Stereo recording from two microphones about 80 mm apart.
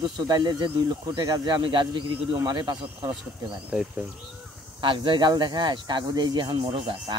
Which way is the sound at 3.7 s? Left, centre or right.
Centre.